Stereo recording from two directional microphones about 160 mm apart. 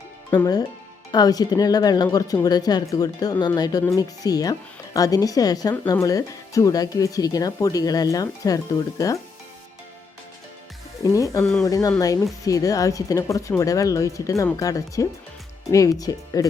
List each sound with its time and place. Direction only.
0.3 s speech: 25° left (ahead or behind)
11.0 s speech: 20° left (ahead or behind)